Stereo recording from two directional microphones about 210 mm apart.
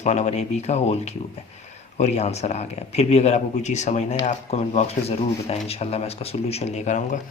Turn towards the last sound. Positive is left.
turn(degrees=35)  # may be behind; listen again after turning